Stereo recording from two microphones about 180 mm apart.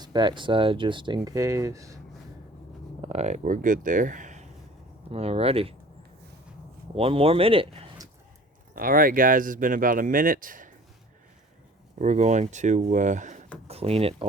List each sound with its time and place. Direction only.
0.0 s speech: 25° right (ahead or behind)
3.0 s speech: 35° right (ahead or behind)
6.9 s speech: 30° right (ahead or behind)
8.7 s speech: 50° right (ahead or behind)
11.9 s speech: 40° right (ahead or behind)